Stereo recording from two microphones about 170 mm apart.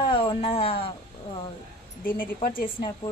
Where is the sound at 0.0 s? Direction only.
30° left (ahead or behind).